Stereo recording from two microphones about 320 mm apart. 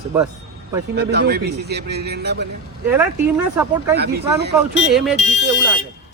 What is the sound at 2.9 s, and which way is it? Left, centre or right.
Speech, centre.